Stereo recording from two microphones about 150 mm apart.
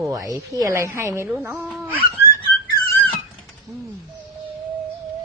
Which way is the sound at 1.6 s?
5° right (ahead or behind).